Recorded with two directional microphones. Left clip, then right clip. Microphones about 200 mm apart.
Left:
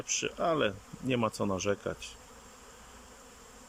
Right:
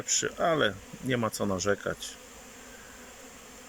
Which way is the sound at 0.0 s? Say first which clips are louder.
Right 3 dB; 10° left (ahead or behind).